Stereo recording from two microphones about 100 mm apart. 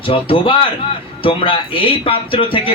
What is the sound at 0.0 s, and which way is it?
Speech, 60° left (ahead or behind).